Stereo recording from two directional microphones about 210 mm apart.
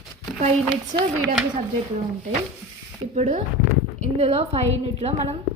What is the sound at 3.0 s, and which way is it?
A woman's voice, 30° right (ahead or behind).